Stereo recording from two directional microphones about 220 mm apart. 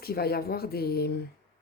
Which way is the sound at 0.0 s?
45° left (ahead or behind).